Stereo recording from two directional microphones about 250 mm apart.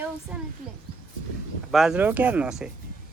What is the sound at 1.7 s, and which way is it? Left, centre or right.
Speech, centre.